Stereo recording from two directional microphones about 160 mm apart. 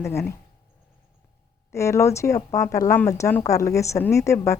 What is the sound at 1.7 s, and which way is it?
A woman's voice, 15° left (ahead or behind).